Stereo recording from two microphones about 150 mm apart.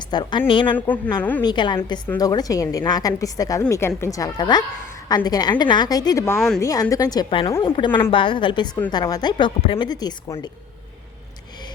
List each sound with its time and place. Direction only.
0.1 s a woman's voice: 30° left (ahead or behind)